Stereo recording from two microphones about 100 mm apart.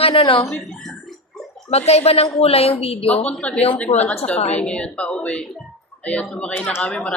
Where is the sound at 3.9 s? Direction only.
40° left (ahead or behind).